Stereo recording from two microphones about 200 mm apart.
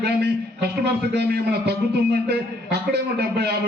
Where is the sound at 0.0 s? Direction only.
55° right (ahead or behind).